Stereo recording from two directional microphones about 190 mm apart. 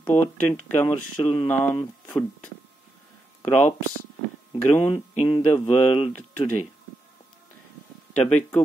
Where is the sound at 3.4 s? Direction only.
35° left (ahead or behind).